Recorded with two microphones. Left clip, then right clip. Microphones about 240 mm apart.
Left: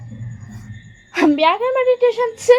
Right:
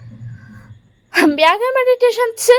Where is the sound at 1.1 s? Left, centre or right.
Right.